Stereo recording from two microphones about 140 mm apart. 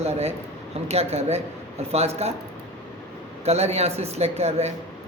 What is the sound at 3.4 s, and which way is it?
Speech, 50° right (ahead or behind).